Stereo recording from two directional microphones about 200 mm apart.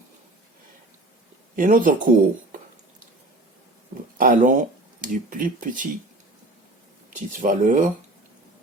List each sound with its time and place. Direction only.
1.5 s speech: 45° right (ahead or behind)
4.2 s speech: 40° right (ahead or behind)
7.1 s speech: 40° right (ahead or behind)